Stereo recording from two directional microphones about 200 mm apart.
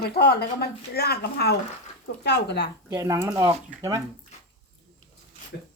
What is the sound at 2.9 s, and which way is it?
Speech, 15° right (ahead or behind).